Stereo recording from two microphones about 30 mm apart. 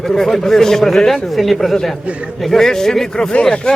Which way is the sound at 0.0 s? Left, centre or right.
Centre.